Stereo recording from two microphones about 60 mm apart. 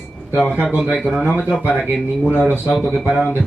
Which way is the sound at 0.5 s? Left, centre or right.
Right.